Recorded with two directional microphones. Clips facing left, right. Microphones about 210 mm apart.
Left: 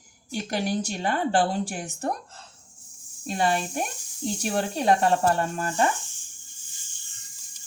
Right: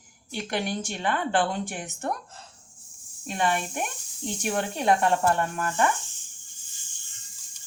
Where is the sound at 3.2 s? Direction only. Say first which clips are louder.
Left 2 dB; 35° left (ahead or behind).